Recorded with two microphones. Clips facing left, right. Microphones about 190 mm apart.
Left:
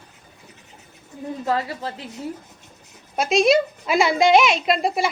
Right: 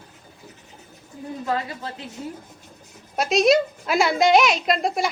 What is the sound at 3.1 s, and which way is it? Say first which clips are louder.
A woman's voice: left 1 dB; centre (ahead or behind).